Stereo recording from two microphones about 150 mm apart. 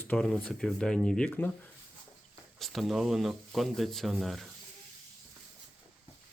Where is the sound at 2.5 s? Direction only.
Centre (ahead or behind).